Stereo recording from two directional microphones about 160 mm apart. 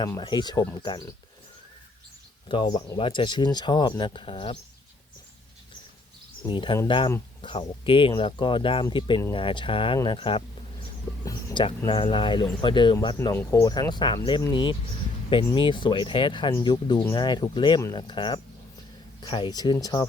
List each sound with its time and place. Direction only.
0.2 s speech: 30° left (ahead or behind)
2.5 s speech: 25° left (ahead or behind)
6.5 s speech: 30° left (ahead or behind)
13.3 s speech: 15° left (ahead or behind)